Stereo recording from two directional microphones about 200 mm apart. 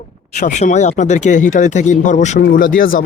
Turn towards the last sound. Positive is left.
turn(degrees=45)  # may be behind; listen again after turning